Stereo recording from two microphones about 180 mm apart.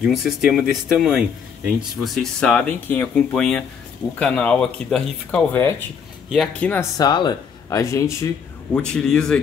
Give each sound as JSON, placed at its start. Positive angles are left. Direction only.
{"t": 0.0, "sound": "speech", "side_deg": 0}
{"t": 6.2, "sound": "speech", "side_deg": 0}
{"t": 7.0, "sound": "speech", "side_deg": 25}
{"t": 8.7, "sound": "speech", "side_deg": 5}